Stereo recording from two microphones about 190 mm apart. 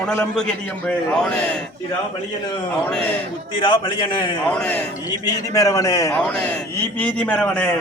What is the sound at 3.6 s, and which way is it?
Speech, 25° left (ahead or behind).